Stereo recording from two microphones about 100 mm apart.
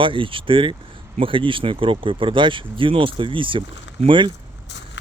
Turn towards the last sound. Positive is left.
turn(degrees=-55)  # may be behind; listen again after turning